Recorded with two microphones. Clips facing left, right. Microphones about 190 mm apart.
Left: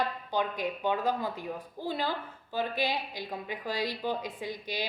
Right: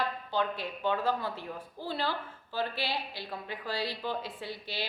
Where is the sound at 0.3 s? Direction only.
15° left (ahead or behind).